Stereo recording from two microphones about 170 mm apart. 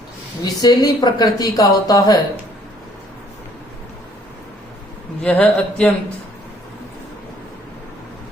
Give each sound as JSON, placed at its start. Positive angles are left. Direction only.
{"t": 0.4, "sound": "speech", "side_deg": 20}
{"t": 5.2, "sound": "speech", "side_deg": 10}